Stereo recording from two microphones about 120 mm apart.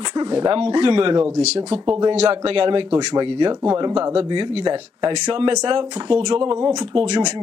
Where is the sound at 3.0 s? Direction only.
35° right (ahead or behind).